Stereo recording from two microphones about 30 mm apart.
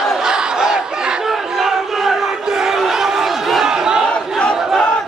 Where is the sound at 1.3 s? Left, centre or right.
Centre.